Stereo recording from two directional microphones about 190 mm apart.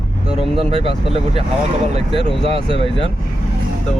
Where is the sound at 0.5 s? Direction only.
30° right (ahead or behind).